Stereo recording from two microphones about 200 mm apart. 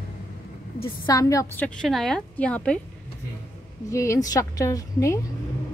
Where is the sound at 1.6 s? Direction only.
Centre (ahead or behind).